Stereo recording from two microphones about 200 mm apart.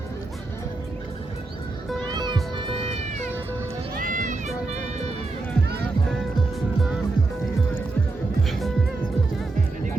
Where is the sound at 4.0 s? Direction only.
40° right (ahead or behind).